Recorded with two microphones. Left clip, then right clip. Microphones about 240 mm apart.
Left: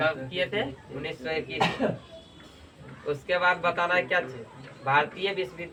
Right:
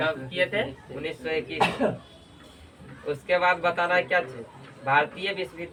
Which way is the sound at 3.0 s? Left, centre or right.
Centre.